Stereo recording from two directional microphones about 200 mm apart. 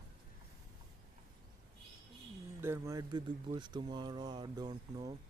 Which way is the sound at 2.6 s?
15° right (ahead or behind).